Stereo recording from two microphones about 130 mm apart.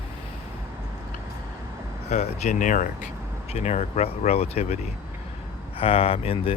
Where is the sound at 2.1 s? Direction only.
60° left (ahead or behind); by 3.1 s 85° left.